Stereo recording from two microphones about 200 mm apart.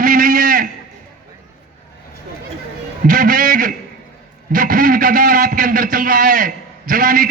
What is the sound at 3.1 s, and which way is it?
A man's voice, 45° right (ahead or behind).